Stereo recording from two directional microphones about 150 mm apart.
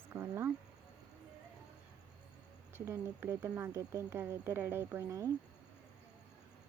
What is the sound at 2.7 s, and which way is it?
Speech, 15° right (ahead or behind).